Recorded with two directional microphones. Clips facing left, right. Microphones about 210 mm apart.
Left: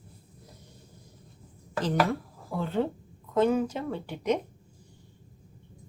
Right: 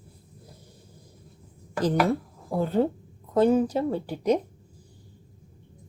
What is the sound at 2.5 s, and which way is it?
A woman's voice, 40° right (ahead or behind).